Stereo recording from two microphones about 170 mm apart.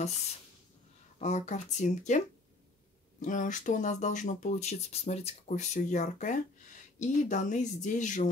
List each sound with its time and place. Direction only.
1.2 s speech: 45° left (ahead or behind)